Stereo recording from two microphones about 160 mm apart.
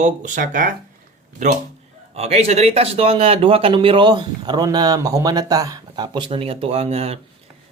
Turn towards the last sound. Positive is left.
turn(degrees=-40)  # may be behind; listen again after turning